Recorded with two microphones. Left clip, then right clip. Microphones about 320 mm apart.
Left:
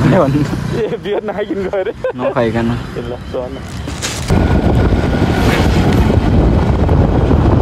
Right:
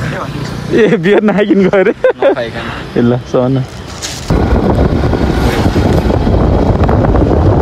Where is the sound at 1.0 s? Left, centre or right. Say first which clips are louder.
Right 8 dB; right.